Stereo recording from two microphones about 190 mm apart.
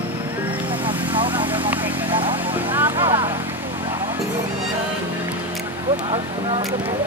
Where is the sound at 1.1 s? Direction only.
25° right (ahead or behind).